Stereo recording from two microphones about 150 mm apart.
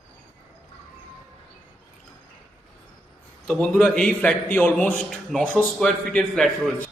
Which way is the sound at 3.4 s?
5° left (ahead or behind).